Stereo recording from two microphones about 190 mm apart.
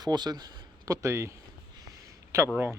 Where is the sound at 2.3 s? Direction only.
15° right (ahead or behind).